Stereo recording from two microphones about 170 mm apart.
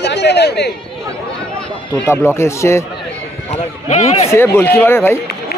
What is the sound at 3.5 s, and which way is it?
Speech, 40° left (ahead or behind).